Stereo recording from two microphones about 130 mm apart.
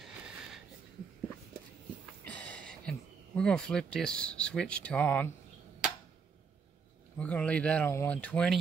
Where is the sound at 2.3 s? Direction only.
10° left (ahead or behind).